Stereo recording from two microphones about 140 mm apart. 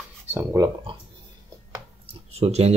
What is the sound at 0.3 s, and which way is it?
Speech, 20° right (ahead or behind).